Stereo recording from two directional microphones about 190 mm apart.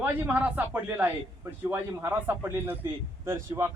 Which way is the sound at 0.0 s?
5° right (ahead or behind).